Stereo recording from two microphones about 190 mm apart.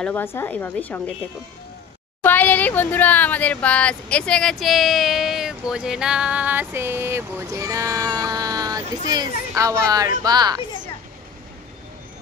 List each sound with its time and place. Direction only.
0.0 s a woman's voice: 10° left (ahead or behind)
2.2 s speech: 10° left (ahead or behind); by 10.6 s 20° right (ahead or behind)